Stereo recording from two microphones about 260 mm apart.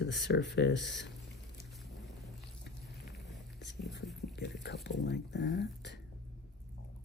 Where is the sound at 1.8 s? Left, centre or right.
Centre.